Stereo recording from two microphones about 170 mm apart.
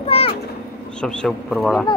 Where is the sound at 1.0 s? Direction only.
5° left (ahead or behind).